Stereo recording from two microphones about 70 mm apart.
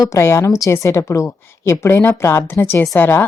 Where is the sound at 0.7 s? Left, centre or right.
Left.